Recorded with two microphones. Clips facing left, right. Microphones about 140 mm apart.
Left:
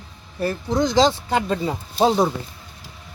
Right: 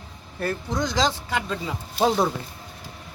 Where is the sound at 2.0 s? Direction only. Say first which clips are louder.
Left 3 dB; 20° left (ahead or behind).